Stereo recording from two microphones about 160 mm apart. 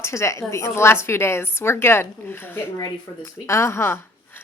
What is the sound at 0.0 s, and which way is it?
A woman's voice, 15° left (ahead or behind).